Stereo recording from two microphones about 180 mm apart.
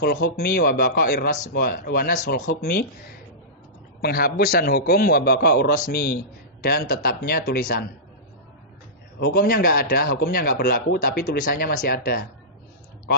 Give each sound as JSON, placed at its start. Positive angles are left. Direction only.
{"t": 0.0, "sound": "a man's voice", "side_deg": 60}
{"t": 4.0, "sound": "a man's voice", "side_deg": 60}
{"t": 9.2, "sound": "a man's voice", "side_deg": 55}